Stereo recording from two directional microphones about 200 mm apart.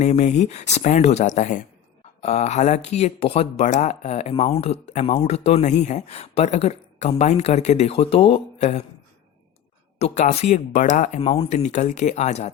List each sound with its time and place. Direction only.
0.0 s speech: 35° left (ahead or behind)
10.0 s speech: 35° left (ahead or behind)